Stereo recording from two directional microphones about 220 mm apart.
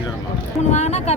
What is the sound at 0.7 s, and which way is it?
Speech, 30° left (ahead or behind).